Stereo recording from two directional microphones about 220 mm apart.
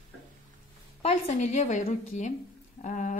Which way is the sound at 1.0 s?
30° left (ahead or behind).